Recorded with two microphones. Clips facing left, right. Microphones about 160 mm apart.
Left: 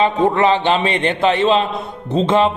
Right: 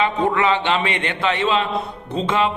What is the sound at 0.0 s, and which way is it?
A man's voice, 35° left (ahead or behind).